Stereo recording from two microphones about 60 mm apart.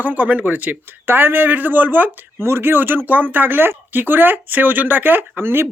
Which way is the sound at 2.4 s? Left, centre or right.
Right.